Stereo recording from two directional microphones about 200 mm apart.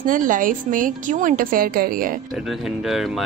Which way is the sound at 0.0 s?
40° right (ahead or behind).